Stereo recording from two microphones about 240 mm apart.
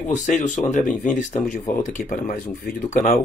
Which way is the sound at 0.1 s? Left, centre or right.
Left.